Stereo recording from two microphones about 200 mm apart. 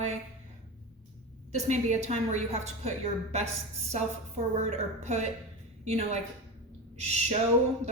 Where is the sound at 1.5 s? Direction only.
35° right (ahead or behind).